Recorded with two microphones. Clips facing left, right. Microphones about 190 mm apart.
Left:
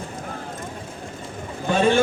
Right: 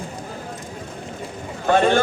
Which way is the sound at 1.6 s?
65° right (ahead or behind).